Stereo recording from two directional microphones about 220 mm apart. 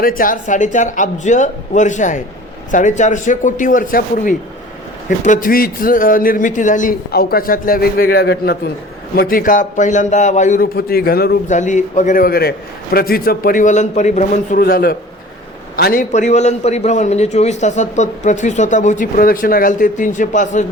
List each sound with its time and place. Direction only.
0.0 s a man's voice: 40° left (ahead or behind)